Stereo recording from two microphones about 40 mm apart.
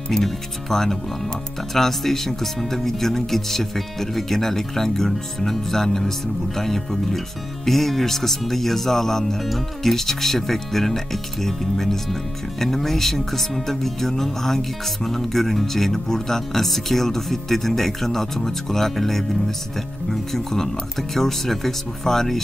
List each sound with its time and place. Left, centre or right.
0.1 s speech: centre